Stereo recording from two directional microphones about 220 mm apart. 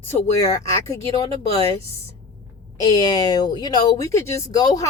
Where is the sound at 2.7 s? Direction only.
15° left (ahead or behind).